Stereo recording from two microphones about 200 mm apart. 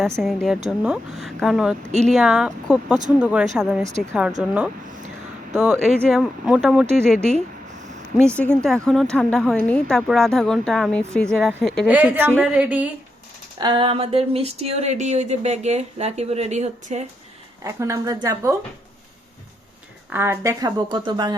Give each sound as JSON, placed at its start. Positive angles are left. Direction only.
{"t": 0.2, "sound": "a woman's voice", "side_deg": 0}
{"t": 1.9, "sound": "speech", "side_deg": -35}
{"t": 2.1, "sound": "a woman's voice", "side_deg": -5}
{"t": 5.5, "sound": "a woman's voice", "side_deg": -5}
{"t": 7.3, "sound": "a sound", "side_deg": -35}
{"t": 8.3, "sound": "a woman's voice", "side_deg": 5}
{"t": 11.9, "sound": "speech", "side_deg": -10}
{"t": 13.6, "sound": "speech", "side_deg": -25}
{"t": 17.6, "sound": "speech", "side_deg": -15}
{"t": 20.1, "sound": "speech", "side_deg": -10}